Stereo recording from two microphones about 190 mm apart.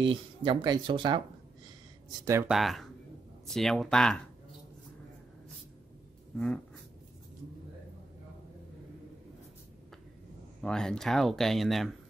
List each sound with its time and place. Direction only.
0.0 s speech: 25° right (ahead or behind)
2.2 s speech: 15° right (ahead or behind)
2.5 s speech: centre (ahead or behind)
6.3 s a sound: 5° left (ahead or behind)
10.6 s speech: 5° left (ahead or behind)